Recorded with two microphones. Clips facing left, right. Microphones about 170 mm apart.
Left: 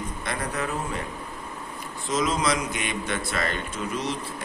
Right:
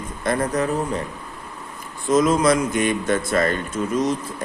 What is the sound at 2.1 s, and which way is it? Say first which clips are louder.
A man's voice: right 8 dB; 50° right (ahead or behind).